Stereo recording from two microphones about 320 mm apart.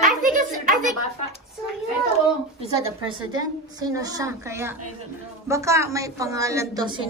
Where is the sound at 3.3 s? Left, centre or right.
Centre.